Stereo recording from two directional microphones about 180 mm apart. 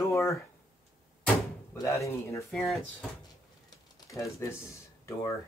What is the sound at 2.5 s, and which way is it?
Speech, centre (ahead or behind).